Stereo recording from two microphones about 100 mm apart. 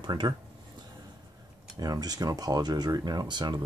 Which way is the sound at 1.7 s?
40° right (ahead or behind).